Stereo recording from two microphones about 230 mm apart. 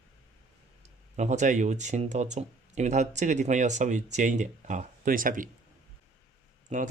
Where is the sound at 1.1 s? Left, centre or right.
Right.